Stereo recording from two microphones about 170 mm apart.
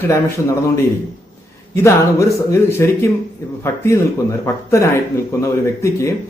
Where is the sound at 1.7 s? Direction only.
15° left (ahead or behind).